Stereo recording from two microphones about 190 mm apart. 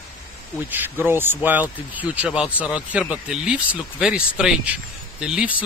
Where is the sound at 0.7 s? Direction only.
10° right (ahead or behind).